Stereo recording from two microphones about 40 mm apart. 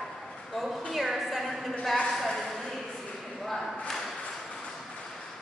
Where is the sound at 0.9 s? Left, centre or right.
Centre.